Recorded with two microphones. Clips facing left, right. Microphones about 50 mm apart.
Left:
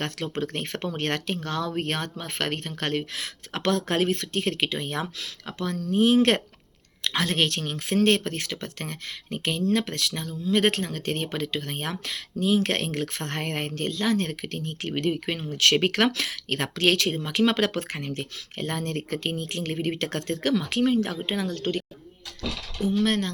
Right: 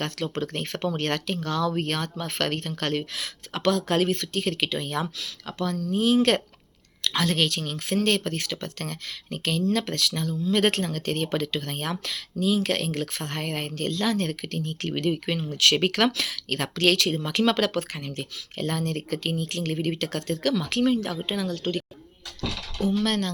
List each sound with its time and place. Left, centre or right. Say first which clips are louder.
0.0 s speech: even; left
12.9 s speech: even; left
13.2 s speech: left 1 dB; left
14.8 s speech: even; centre
20.1 s speech: even; left
20.7 s speech: right 2 dB; centre
20.9 s speech: left 1 dB; left
22.8 s speech: left 1 dB; left